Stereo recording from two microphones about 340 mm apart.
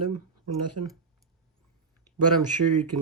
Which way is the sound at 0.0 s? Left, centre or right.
Right.